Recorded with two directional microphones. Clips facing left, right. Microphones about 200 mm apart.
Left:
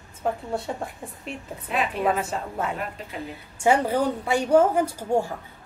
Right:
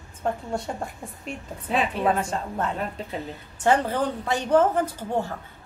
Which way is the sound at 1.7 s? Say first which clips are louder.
Right 2 dB; 30° right (ahead or behind).